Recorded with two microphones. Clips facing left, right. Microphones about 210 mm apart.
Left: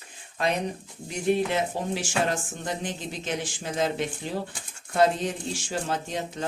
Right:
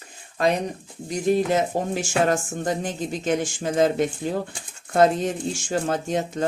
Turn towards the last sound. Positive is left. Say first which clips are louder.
# right 7 dB
turn(degrees=-45)  # may be behind; listen again after turning